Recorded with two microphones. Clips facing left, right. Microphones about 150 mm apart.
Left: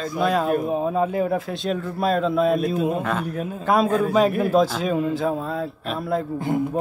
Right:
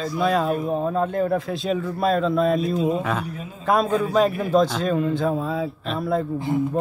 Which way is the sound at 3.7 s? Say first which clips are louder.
Left 1 dB; centre (ahead or behind).